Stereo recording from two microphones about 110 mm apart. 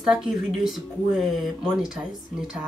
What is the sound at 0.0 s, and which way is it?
Speech, 5° right (ahead or behind).